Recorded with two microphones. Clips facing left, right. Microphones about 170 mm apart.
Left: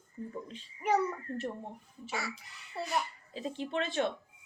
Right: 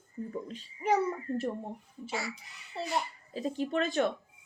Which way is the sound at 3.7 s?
40° right (ahead or behind).